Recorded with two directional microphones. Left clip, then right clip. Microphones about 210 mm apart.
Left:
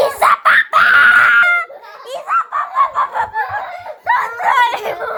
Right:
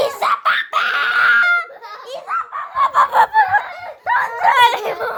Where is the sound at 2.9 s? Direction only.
35° right (ahead or behind).